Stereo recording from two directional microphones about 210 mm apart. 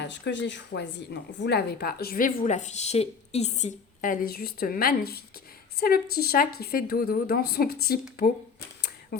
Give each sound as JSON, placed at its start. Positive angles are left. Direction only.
{"t": 0.0, "sound": "a woman's voice", "side_deg": 60}